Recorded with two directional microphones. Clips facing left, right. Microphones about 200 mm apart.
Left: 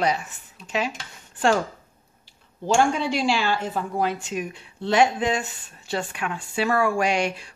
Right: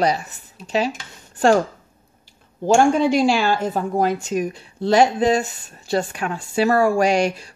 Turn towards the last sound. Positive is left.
turn(degrees=-40)  # may be behind; listen again after turning